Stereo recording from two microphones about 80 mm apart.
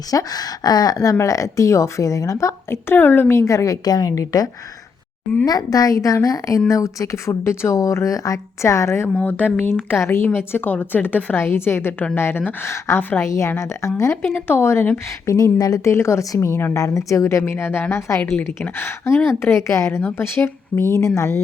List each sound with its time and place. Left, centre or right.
0.1 s a woman's voice: left
5.5 s a woman's voice: left
9.1 s speech: left
13.2 s a woman's voice: left
14.3 s a woman's voice: left
15.5 s speech: left
15.8 s a woman's voice: left